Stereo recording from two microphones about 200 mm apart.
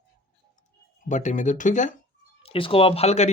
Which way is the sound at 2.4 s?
25° left (ahead or behind).